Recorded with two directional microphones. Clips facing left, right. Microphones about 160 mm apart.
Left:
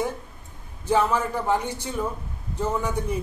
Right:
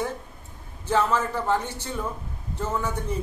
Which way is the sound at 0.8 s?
10° left (ahead or behind).